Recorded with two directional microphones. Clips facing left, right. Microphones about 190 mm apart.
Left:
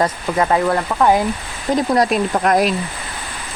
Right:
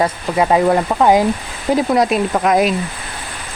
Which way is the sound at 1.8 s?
Centre (ahead or behind).